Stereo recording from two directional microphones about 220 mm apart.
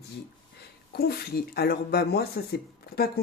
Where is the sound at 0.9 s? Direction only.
45° left (ahead or behind).